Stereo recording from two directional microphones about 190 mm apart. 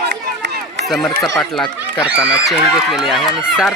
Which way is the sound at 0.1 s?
65° right (ahead or behind).